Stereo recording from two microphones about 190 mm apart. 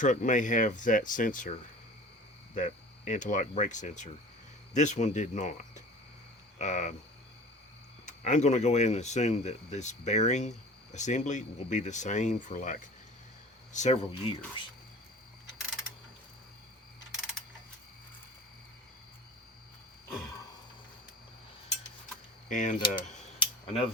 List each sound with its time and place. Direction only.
0.0 s speech: 40° left (ahead or behind)
2.6 s speech: 40° left (ahead or behind)
8.0 s speech: 40° left (ahead or behind)
22.4 s speech: 40° left (ahead or behind)